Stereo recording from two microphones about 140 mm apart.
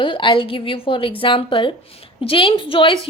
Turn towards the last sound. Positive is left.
turn(degrees=40)  # may be behind; listen again after turning